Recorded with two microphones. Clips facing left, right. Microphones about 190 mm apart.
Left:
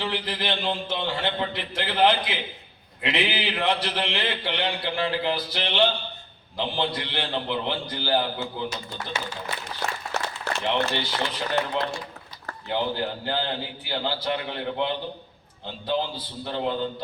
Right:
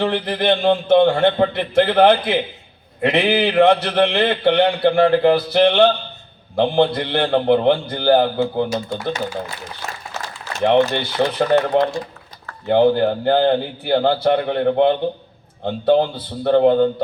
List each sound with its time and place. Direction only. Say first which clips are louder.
0.0 s a man's voice: right 10 dB; 55° right (ahead or behind)
10.6 s a man's voice: right 11 dB; 55° right (ahead or behind)